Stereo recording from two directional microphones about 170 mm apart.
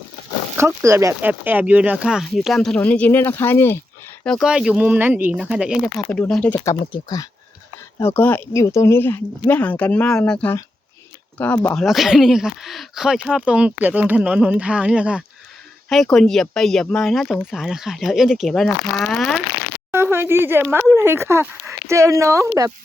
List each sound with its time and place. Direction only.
0.5 s speech: 15° right (ahead or behind); by 3.8 s 15° left (ahead or behind)
4.2 s speech: centre (ahead or behind)
6.9 s speech: 25° left (ahead or behind); by 19.4 s 5° left (ahead or behind)
19.9 s speech: 15° right (ahead or behind)